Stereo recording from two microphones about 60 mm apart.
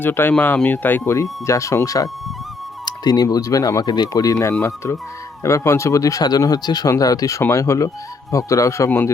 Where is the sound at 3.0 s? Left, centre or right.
Left.